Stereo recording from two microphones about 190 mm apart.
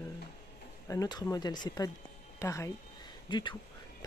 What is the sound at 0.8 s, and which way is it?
Speech, 20° left (ahead or behind).